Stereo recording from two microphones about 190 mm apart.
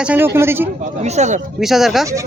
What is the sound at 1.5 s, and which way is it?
Speech, centre (ahead or behind).